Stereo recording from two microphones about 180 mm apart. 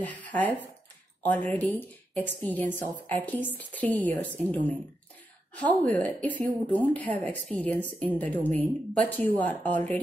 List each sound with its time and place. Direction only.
0.0 s speech: 10° left (ahead or behind)